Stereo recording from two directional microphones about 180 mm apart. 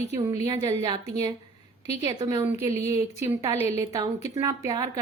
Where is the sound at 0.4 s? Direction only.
20° right (ahead or behind).